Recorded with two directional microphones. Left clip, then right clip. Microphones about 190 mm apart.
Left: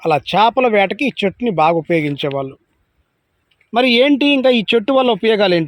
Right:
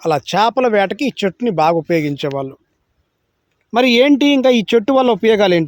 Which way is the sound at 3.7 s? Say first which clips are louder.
Right 1 dB; 20° right (ahead or behind).